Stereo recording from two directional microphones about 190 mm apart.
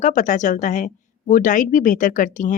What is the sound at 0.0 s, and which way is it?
A woman's voice, 40° left (ahead or behind).